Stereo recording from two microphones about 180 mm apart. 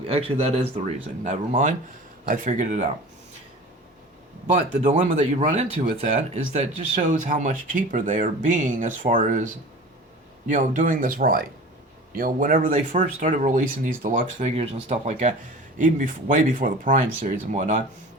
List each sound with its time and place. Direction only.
0.1 s speech: 35° right (ahead or behind)
4.8 s speech: 45° right (ahead or behind)
12.9 s speech: 30° right (ahead or behind)
13.2 s speech: 45° right (ahead or behind)